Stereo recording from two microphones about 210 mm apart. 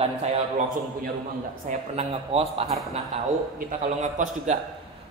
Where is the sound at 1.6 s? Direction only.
30° right (ahead or behind).